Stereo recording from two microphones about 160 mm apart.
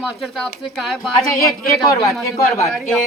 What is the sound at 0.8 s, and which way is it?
Speech, centre (ahead or behind).